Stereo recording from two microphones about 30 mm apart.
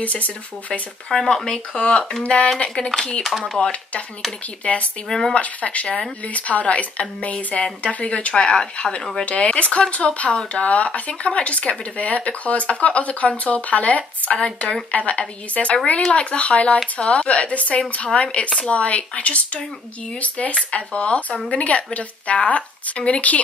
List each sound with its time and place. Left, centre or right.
0.0 s speech: left
1.1 s speech: left
1.7 s speech: left
2.2 s speech: left
2.6 s speech: left
4.6 s speech: left
9.2 s speech: left
9.5 s speech: left
12.0 s speech: left
14.3 s speech: left
14.9 s speech: left